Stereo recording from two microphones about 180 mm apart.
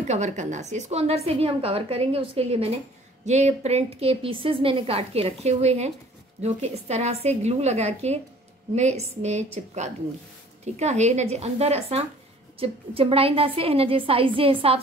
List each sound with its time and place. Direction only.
0.1 s a woman's voice: 40° right (ahead or behind)